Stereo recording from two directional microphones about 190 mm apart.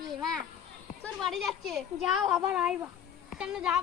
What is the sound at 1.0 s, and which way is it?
Speech, centre (ahead or behind).